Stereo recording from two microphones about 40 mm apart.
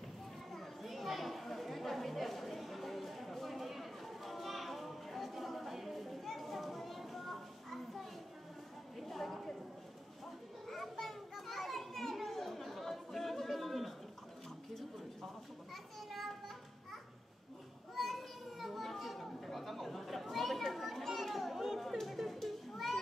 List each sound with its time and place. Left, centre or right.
0.5 s chatter: centre
8.9 s a sound: centre
10.7 s children playing: centre
15.7 s children playing: centre
17.9 s children playing: centre